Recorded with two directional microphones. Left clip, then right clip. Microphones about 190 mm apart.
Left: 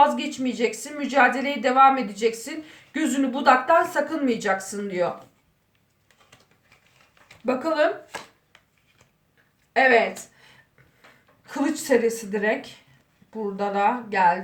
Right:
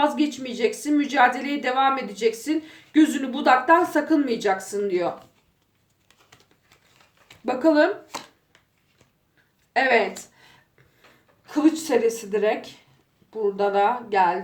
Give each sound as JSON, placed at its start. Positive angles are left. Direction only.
{"t": 0.0, "sound": "a woman's voice", "side_deg": -35}
{"t": 7.4, "sound": "a woman's voice", "side_deg": -40}
{"t": 9.7, "sound": "speech", "side_deg": -40}
{"t": 11.4, "sound": "a woman's voice", "side_deg": -30}